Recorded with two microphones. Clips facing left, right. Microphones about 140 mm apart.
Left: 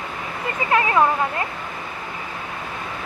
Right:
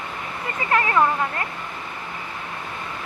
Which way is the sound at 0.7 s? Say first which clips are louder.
Left 2 dB; 20° left (ahead or behind).